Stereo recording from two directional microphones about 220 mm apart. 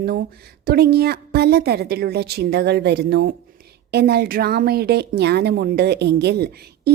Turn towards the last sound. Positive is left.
turn(degrees=-45)  # may be behind; listen again after turning